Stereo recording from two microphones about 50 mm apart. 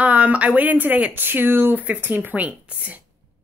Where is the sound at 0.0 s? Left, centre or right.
Right.